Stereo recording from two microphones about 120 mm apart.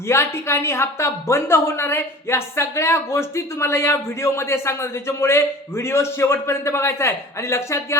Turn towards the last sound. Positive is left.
turn(degrees=25)  # may be behind; listen again after turning